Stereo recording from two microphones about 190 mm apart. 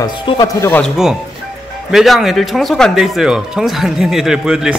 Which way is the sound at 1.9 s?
Centre (ahead or behind).